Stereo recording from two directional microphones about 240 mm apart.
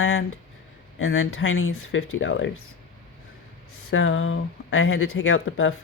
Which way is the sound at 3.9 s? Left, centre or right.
Left.